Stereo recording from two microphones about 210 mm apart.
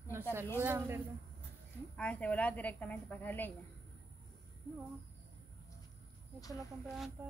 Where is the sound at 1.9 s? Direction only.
5° left (ahead or behind).